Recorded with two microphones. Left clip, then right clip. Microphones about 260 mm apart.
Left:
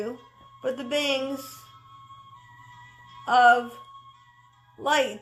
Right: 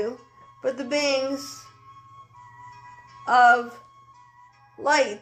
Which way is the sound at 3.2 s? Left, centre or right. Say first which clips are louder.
Right 1 dB; left.